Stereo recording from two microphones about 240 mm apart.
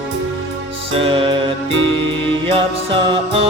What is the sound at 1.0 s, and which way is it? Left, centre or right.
Music, right.